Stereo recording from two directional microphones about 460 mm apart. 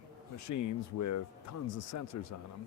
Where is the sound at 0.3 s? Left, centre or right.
Left.